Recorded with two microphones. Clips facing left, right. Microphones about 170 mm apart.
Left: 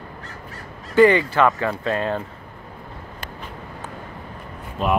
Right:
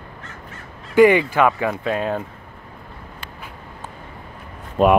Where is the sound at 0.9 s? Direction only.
15° right (ahead or behind).